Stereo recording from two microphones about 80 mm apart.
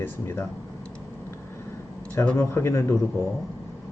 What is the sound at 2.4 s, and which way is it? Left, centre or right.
Speech, left.